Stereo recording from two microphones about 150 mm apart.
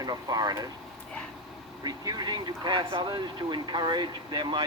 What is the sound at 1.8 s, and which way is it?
Speech, 25° right (ahead or behind).